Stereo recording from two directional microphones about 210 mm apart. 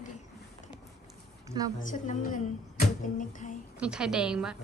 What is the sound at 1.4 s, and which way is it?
Speech, 15° right (ahead or behind).